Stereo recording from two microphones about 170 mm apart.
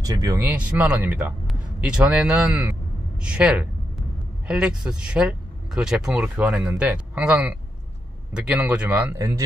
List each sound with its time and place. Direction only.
0.0 s speech: 20° right (ahead or behind)
3.2 s a sound: 5° right (ahead or behind)
4.5 s speech: 5° right (ahead or behind)